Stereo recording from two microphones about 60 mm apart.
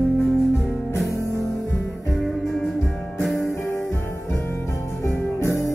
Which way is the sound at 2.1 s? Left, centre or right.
Centre.